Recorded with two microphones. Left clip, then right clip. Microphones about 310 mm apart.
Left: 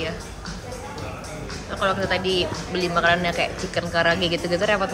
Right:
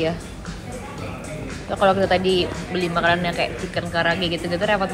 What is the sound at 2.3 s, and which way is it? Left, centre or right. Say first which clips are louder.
Speech: right 2 dB; centre.